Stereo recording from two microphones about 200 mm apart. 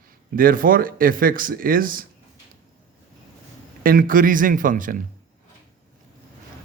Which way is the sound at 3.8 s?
45° right (ahead or behind).